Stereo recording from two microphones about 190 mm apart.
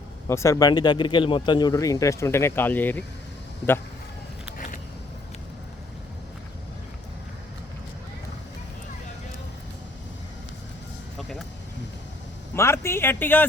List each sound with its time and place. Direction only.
0.3 s speech: 15° left (ahead or behind)
4.5 s vehicle: 45° left (ahead or behind)
11.2 s music: centre (ahead or behind)
12.5 s speech: 15° left (ahead or behind)